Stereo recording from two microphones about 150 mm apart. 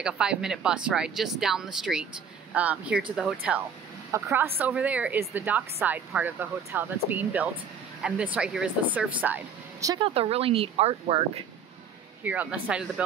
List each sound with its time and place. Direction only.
0.0 s speech: 5° right (ahead or behind)
4.1 s speech: 20° right (ahead or behind)
9.9 s speech: 40° right (ahead or behind)
12.2 s speech: 10° right (ahead or behind)